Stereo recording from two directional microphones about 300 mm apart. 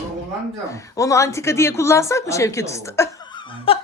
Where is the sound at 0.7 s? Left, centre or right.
Centre.